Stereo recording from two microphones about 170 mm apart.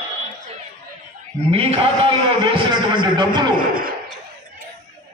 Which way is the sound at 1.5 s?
35° right (ahead or behind).